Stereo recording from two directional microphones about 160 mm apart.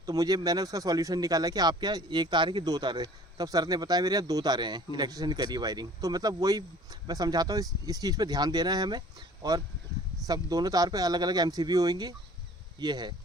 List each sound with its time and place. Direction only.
0.0 s speech: 20° right (ahead or behind)